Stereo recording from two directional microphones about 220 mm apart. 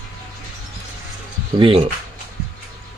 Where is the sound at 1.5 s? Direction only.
25° right (ahead or behind).